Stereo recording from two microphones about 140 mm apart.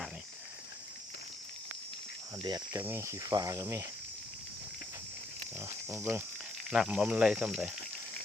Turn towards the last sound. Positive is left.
turn(degrees=-5)  # may be behind; listen again after turning